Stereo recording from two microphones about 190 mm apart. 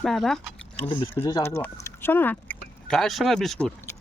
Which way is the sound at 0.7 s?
25° left (ahead or behind).